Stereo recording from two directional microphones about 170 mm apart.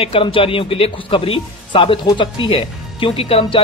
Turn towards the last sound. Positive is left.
turn(degrees=35)  # may be behind; listen again after turning